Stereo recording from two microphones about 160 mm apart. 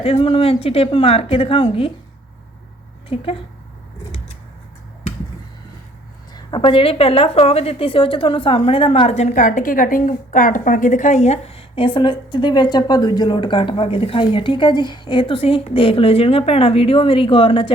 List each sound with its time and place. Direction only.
0.0 s a woman's voice: 35° left (ahead or behind)
3.1 s a woman's voice: 35° left (ahead or behind)
6.3 s a woman's voice: 30° left (ahead or behind)